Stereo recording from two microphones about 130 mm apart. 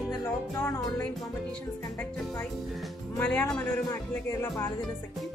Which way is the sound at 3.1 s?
10° left (ahead or behind).